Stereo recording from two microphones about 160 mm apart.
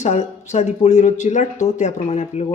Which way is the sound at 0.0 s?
45° left (ahead or behind).